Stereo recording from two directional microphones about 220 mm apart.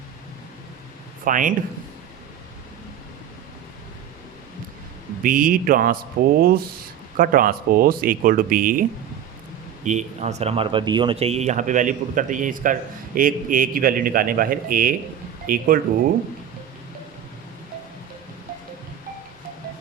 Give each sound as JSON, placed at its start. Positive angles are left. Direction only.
{"t": 1.2, "sound": "speech", "side_deg": -35}
{"t": 5.2, "sound": "speech", "side_deg": -40}
{"t": 9.8, "sound": "speech", "side_deg": -35}